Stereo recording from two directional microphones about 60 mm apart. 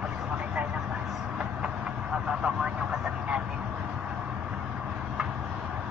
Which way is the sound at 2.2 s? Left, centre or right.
Centre.